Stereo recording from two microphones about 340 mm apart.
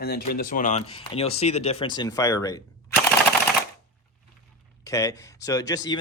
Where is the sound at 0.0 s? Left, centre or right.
Left; by 2.6 s centre.